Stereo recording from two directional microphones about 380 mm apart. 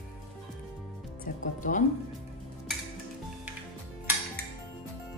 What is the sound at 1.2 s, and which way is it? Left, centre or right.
Speech, centre.